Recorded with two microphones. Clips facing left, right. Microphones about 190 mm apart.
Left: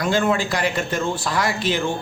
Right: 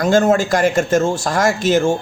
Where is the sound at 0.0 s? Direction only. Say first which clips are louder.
Right 6 dB; 45° right (ahead or behind).